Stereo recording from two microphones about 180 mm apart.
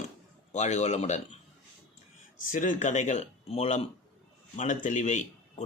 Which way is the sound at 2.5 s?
45° left (ahead or behind).